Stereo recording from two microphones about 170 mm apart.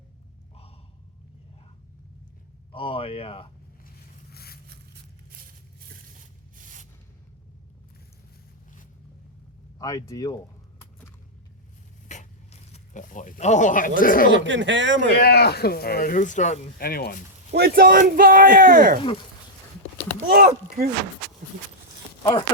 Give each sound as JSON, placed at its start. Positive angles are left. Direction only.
{"t": 2.7, "sound": "speech", "side_deg": 30}
{"t": 4.3, "sound": "zipper", "side_deg": 65}
{"t": 6.1, "sound": "rub", "side_deg": -50}
{"t": 9.7, "sound": "speech", "side_deg": 20}
{"t": 12.0, "sound": "speech", "side_deg": 45}
{"t": 14.3, "sound": "speech", "side_deg": -90}
{"t": 15.2, "sound": "speech", "side_deg": 70}
{"t": 16.8, "sound": "speech", "side_deg": 60}
{"t": 17.5, "sound": "speech", "side_deg": -65}
{"t": 20.2, "sound": "speech", "side_deg": -60}
{"t": 22.2, "sound": "speech", "side_deg": 25}